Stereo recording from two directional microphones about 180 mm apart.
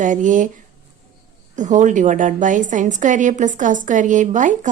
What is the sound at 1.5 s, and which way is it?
A woman's voice, 45° right (ahead or behind).